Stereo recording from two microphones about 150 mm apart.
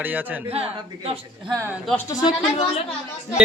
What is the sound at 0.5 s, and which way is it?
Speech, 40° right (ahead or behind).